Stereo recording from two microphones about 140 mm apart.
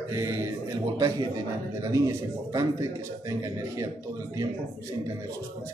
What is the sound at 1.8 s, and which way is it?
Speech, 25° right (ahead or behind).